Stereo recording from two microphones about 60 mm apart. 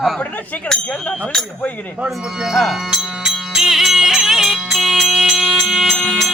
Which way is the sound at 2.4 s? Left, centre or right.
Centre.